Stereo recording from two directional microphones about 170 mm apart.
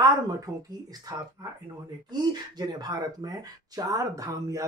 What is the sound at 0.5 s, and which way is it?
Speech, 20° right (ahead or behind).